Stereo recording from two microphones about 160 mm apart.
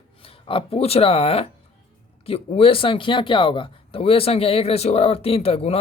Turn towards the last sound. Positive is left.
turn(degrees=40)  # may be behind; listen again after turning